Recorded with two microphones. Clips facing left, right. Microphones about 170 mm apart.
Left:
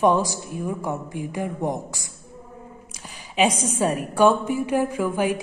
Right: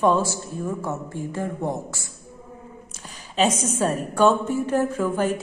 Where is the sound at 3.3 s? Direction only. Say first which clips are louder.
Even; 10° left (ahead or behind).